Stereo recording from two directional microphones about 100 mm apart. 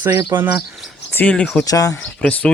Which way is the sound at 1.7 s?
35° left (ahead or behind).